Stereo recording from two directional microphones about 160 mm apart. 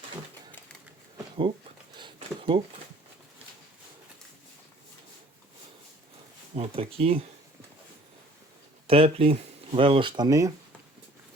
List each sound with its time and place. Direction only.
2.0 s a sound: 30° right (ahead or behind)
6.5 s speech: 35° right (ahead or behind)
8.9 s speech: 35° right (ahead or behind); by 10.5 s 20° right (ahead or behind)